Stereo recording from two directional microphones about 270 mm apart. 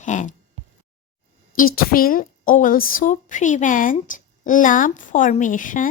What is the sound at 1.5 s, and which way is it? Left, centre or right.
A woman's voice, left.